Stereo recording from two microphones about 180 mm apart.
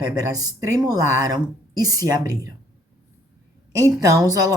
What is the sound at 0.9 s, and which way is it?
A woman's voice, 20° right (ahead or behind).